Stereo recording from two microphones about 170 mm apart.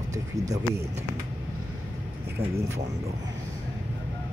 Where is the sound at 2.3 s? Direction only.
15° right (ahead or behind).